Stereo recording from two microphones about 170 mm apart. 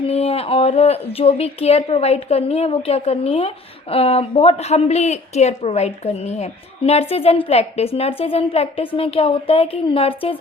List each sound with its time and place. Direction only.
0.0 s speech: 35° left (ahead or behind)